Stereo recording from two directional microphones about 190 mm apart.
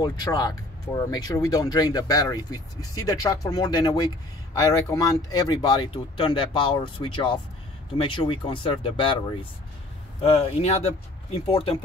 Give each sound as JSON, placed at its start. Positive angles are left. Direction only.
{"t": 0.0, "sound": "speech", "side_deg": 20}